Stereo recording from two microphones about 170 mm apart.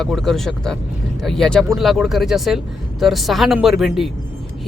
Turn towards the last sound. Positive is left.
turn(degrees=0)  # may be behind; listen again after turning